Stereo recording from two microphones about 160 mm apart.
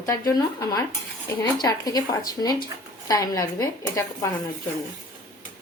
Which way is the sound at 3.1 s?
20° left (ahead or behind).